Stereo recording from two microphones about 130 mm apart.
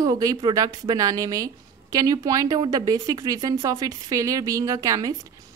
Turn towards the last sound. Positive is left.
turn(degrees=-25)  # may be behind; listen again after turning